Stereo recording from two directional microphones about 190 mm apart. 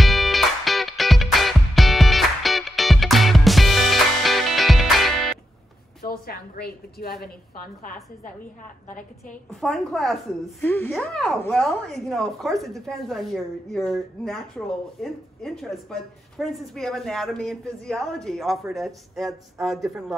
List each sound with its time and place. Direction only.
0.0 s music: centre (ahead or behind)
6.0 s a sound: 50° left (ahead or behind)
9.5 s a woman's voice: centre (ahead or behind)